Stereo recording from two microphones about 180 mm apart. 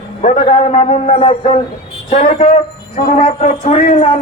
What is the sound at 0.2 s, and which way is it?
A woman's voice, 35° left (ahead or behind).